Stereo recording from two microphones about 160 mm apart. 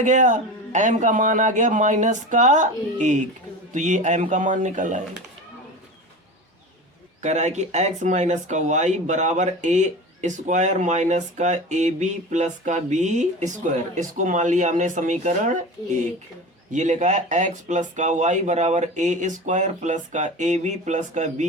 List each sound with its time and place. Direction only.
0.0 s speech: 50° right (ahead or behind)
7.2 s speech: 50° right (ahead or behind)